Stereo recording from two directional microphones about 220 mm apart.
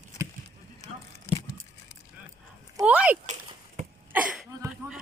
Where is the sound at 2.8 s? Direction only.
5° right (ahead or behind).